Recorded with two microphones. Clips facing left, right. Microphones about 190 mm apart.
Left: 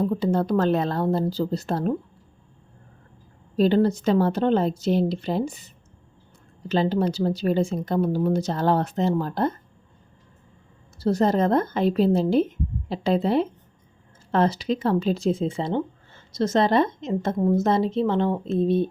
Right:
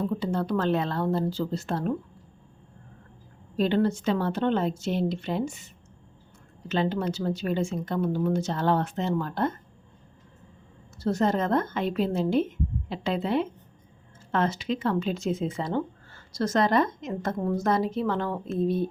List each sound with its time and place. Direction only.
0.0 s speech: 40° left (ahead or behind)
3.6 s speech: 35° left (ahead or behind)
10.9 s speech: 35° left (ahead or behind)